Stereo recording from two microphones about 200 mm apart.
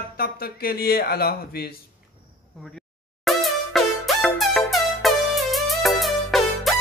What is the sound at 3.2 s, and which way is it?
Music, centre (ahead or behind).